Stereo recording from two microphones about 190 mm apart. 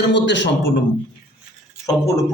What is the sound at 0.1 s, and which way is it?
Speech, 70° left (ahead or behind).